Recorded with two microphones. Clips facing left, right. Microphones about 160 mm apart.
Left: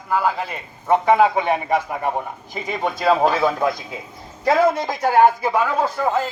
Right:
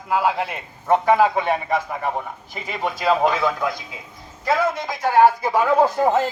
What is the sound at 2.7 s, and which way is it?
Speech, centre (ahead or behind).